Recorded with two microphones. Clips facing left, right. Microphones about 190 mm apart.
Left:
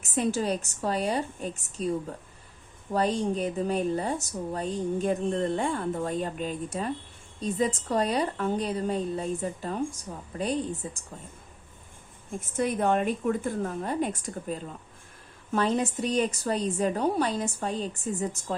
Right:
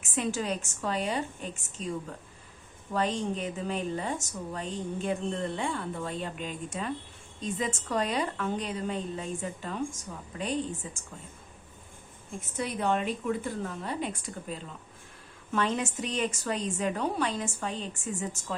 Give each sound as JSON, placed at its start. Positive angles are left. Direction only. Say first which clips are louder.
{"t": 0.0, "sound": "speech", "louder": "left 4 dB", "side_deg": 35}
{"t": 2.9, "sound": "speech", "louder": "left 4 dB", "side_deg": 40}
{"t": 12.4, "sound": "a woman's voice", "louder": "left 5 dB", "side_deg": 50}